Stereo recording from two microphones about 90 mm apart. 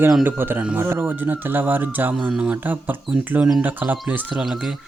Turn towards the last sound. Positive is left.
turn(degrees=-20)  # may be behind; listen again after turning